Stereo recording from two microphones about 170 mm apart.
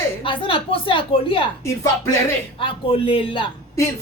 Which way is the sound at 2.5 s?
30° left (ahead or behind).